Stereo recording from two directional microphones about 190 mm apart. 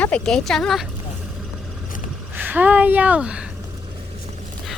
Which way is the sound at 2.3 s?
10° right (ahead or behind).